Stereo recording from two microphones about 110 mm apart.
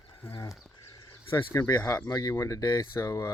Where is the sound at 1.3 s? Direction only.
25° left (ahead or behind).